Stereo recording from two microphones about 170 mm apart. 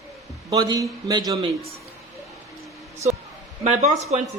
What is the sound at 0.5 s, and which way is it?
Speech, 20° right (ahead or behind).